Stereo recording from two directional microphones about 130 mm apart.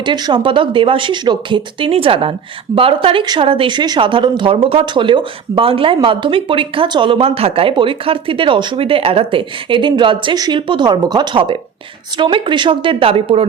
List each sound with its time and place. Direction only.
0.0 s a woman's voice: 35° right (ahead or behind)